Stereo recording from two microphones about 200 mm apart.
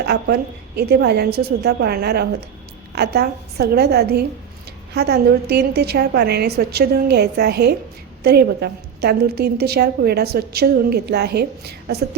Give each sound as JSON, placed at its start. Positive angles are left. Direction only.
{"t": 0.0, "sound": "a woman's voice", "side_deg": -55}